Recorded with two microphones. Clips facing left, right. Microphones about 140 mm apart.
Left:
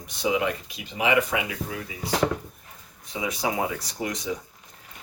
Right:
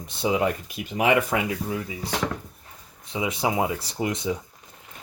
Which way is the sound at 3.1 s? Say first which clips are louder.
Right 3 dB; 25° right (ahead or behind).